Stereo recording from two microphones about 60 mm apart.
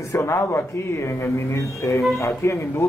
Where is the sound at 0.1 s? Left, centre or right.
Left.